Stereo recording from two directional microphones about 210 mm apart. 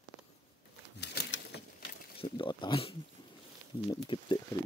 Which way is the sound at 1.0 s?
50° left (ahead or behind).